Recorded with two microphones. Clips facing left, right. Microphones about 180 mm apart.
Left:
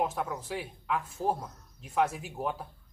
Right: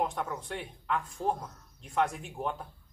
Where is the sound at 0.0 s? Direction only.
5° left (ahead or behind).